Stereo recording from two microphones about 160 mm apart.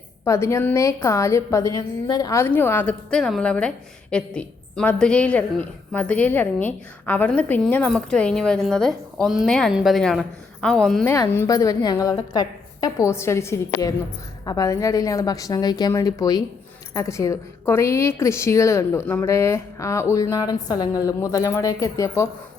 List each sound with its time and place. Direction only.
0.3 s a woman's voice: 15° left (ahead or behind)
11.0 s speech: 15° left (ahead or behind)